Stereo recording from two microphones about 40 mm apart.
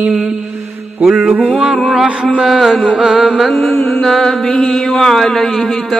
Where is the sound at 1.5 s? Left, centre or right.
Right.